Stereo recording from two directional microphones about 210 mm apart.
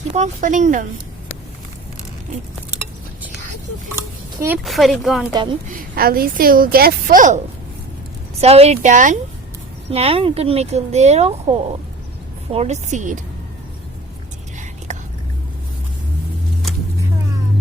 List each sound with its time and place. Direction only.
0.1 s speech: 35° right (ahead or behind)
4.4 s speech: 10° right (ahead or behind)
5.6 s a woman's voice: 40° right (ahead or behind)
8.4 s speech: 30° right (ahead or behind)
14.9 s whispering: 35° right (ahead or behind)